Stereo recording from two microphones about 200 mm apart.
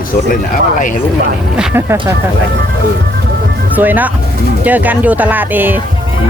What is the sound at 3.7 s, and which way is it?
Speech, 10° right (ahead or behind).